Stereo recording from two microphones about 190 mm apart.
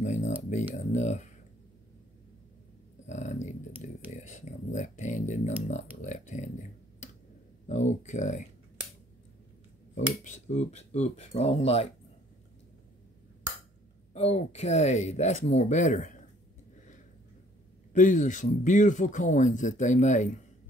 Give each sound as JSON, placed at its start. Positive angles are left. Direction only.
{"t": 0.0, "sound": "a sound", "side_deg": 40}
{"t": 0.7, "sound": "speech", "side_deg": 40}
{"t": 3.1, "sound": "speech", "side_deg": 40}
{"t": 7.6, "sound": "speech", "side_deg": 40}
{"t": 9.9, "sound": "speech", "side_deg": 40}
{"t": 14.1, "sound": "speech", "side_deg": 35}
{"t": 17.9, "sound": "speech", "side_deg": 40}